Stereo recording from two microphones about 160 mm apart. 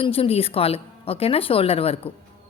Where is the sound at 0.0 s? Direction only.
35° left (ahead or behind).